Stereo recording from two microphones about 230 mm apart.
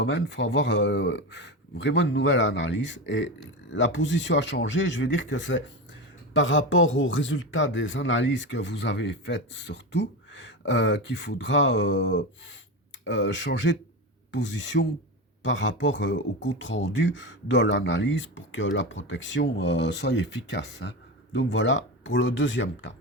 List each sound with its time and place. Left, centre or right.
0.0 s speech: left